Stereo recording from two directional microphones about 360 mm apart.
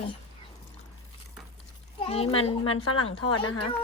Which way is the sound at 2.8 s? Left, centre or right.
Left.